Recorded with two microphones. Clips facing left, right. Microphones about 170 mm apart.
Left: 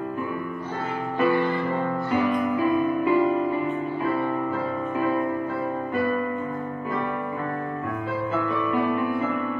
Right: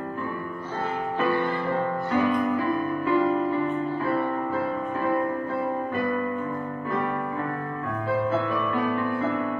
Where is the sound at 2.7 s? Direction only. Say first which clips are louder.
Left 3 dB; 15° left (ahead or behind).